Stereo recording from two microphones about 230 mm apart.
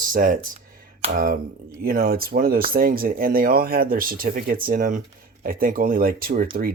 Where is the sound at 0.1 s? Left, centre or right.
Right.